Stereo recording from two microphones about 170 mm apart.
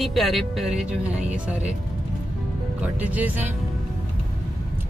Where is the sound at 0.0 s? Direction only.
Centre (ahead or behind).